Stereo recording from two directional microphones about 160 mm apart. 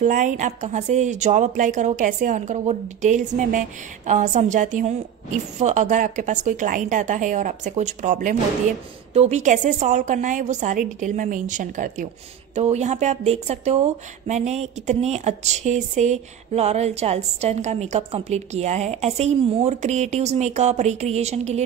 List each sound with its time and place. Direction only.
0.0 s speech: 50° right (ahead or behind)